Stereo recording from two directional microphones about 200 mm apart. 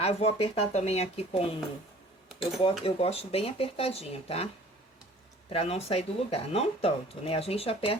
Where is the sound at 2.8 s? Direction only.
30° left (ahead or behind).